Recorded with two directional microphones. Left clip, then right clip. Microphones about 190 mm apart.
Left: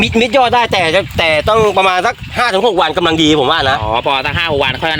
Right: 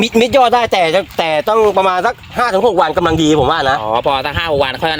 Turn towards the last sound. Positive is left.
turn(degrees=-50)  # may be behind; listen again after turning